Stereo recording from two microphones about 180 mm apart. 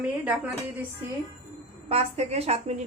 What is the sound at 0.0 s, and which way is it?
Speech, 10° right (ahead or behind).